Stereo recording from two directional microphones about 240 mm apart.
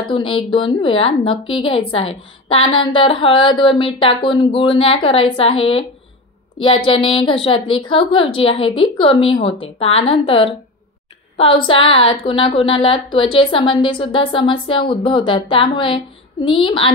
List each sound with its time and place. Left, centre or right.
0.0 s a woman's voice: left